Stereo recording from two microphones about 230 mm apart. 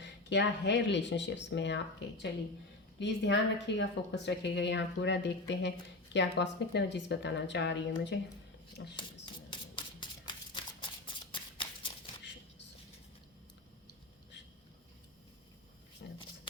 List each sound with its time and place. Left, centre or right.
0.0 s speech: left
9.0 s a sound: centre
16.0 s shuffling cards: left